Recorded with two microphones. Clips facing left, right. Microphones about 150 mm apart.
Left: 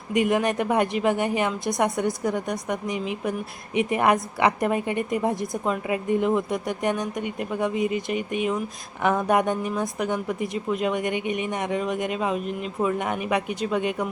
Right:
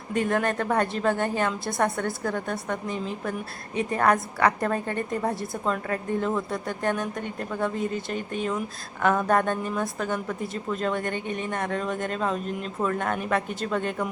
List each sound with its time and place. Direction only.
0.1 s speech: 15° left (ahead or behind)